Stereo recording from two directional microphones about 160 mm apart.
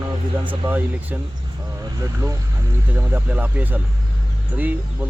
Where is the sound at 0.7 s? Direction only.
10° right (ahead or behind).